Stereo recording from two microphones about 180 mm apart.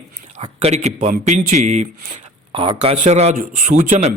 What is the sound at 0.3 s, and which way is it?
Speech, 35° right (ahead or behind).